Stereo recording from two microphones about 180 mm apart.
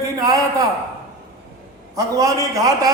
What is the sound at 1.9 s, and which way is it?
Speech, 20° right (ahead or behind).